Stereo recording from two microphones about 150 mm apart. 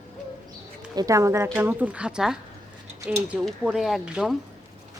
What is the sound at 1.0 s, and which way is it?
Speech, 20° right (ahead or behind).